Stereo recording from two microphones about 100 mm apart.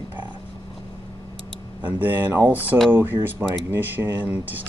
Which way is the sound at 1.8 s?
20° right (ahead or behind).